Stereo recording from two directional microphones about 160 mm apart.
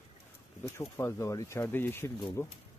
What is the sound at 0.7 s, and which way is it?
Speech, 15° left (ahead or behind).